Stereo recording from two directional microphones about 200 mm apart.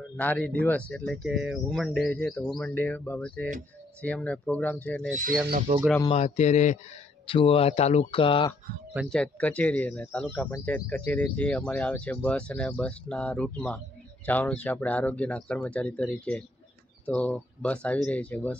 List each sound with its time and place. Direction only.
0.2 s speech: 10° left (ahead or behind)
6.1 s speech: 35° left (ahead or behind)
8.9 s speech: centre (ahead or behind)